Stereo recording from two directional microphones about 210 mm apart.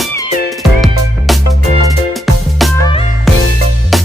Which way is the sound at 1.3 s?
Centre (ahead or behind).